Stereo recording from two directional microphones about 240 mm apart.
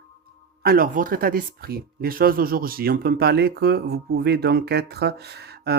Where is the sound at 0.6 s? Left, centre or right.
Right.